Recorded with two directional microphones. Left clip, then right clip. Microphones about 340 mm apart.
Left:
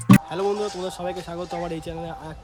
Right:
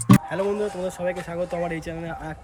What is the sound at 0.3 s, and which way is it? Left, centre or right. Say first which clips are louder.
Speech: even; centre.